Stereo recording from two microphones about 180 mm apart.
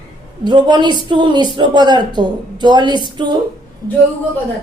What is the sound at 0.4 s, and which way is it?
A man's voice, 25° right (ahead or behind).